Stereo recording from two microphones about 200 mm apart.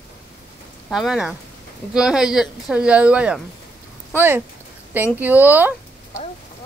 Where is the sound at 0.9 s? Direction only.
Centre (ahead or behind).